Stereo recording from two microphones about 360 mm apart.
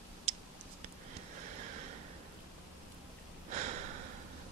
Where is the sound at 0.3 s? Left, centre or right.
Centre.